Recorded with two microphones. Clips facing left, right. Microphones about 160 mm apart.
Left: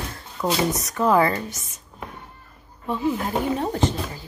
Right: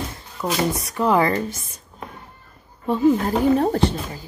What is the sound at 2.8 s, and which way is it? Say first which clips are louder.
Speech: right 7 dB; 40° right (ahead or behind).